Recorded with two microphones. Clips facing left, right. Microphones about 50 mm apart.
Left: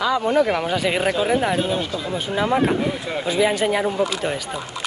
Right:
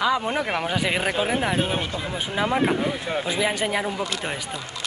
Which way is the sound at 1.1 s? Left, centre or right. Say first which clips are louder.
Left 4 dB; centre.